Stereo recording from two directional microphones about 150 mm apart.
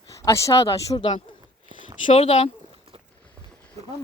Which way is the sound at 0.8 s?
30° left (ahead or behind).